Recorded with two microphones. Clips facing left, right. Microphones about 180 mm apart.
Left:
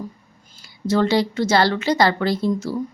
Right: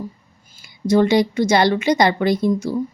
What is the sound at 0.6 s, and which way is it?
A woman's voice, 15° right (ahead or behind).